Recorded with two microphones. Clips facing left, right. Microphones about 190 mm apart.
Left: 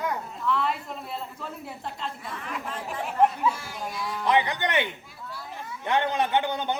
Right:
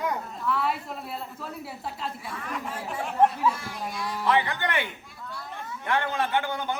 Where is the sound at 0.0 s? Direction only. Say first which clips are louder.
Even; 5° right (ahead or behind).